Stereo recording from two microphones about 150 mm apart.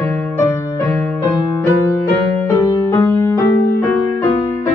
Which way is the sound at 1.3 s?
25° left (ahead or behind).